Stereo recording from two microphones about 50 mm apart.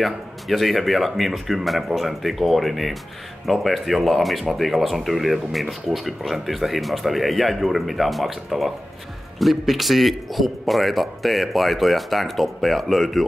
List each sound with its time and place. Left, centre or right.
0.0 s speech: centre